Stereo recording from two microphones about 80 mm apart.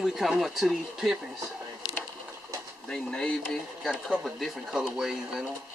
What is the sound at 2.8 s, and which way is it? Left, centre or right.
Speech, centre.